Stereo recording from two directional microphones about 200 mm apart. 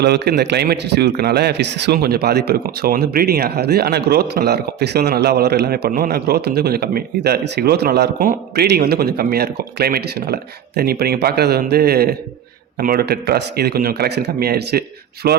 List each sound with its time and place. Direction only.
0.0 s a man's voice: 55° right (ahead or behind)